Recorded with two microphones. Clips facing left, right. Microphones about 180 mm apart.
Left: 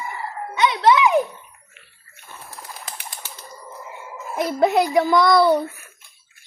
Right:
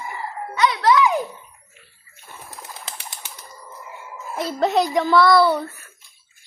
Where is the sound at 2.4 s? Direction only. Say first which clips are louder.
Even; 25° right (ahead or behind).